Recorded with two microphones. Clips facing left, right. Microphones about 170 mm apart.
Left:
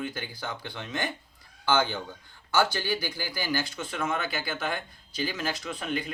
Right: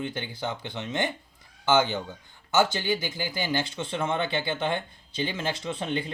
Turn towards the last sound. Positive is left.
turn(degrees=-25)  # may be behind; listen again after turning